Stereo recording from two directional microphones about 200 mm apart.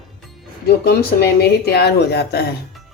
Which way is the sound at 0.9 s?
50° left (ahead or behind).